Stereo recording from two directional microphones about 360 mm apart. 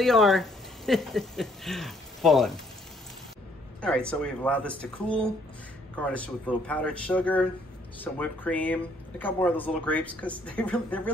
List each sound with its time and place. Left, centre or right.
0.0 s speech: centre
3.8 s speech: centre